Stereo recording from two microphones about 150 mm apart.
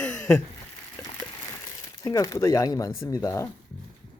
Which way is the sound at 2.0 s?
25° left (ahead or behind).